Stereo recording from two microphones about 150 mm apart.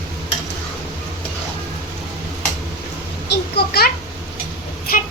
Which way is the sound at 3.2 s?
90° left.